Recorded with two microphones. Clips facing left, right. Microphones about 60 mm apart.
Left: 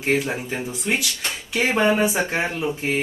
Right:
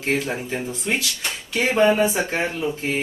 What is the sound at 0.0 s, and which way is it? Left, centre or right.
Speech, centre.